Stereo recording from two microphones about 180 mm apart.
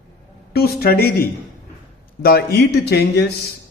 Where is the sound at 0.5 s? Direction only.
60° left (ahead or behind).